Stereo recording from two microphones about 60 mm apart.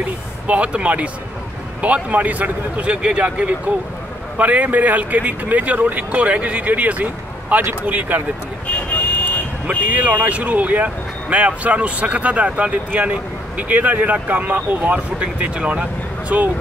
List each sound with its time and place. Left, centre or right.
0.5 s speech: right
8.7 s vehicle: left
9.7 s speech: right
15.1 s speech: centre